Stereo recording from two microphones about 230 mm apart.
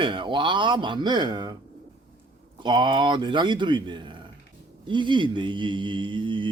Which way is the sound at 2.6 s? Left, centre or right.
Centre.